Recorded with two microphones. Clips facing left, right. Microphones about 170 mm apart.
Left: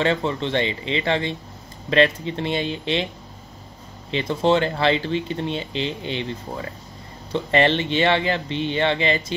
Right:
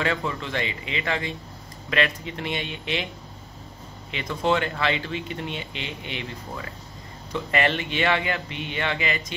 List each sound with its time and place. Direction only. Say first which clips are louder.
0.0 s speech: left 5 dB; 30° left (ahead or behind)
4.1 s speech: left 5 dB; 30° left (ahead or behind)